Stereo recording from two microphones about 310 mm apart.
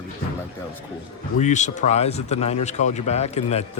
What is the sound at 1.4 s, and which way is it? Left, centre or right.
Speech, left.